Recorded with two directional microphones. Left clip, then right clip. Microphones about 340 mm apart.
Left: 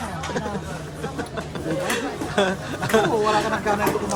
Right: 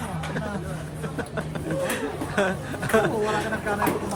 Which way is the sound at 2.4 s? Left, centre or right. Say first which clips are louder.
Left 3 dB; centre.